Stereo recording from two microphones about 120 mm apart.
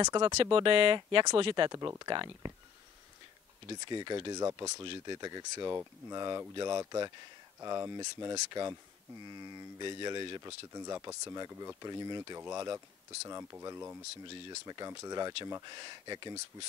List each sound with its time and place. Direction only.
0.0 s speech: 35° right (ahead or behind)
1.8 s speech: 30° right (ahead or behind)
3.6 s speech: 35° right (ahead or behind)
10.4 s speech: 30° right (ahead or behind)